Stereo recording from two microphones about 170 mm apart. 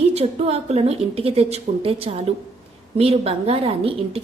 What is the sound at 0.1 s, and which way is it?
A woman's voice, 40° right (ahead or behind).